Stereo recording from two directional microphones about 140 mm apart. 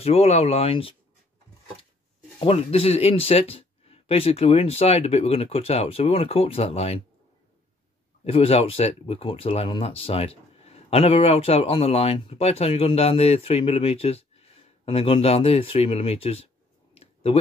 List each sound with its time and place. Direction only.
0.0 s speech: 45° left (ahead or behind)
2.5 s speech: 45° left (ahead or behind)
8.2 s speech: 45° left (ahead or behind)
16.9 s a sound: 45° left (ahead or behind)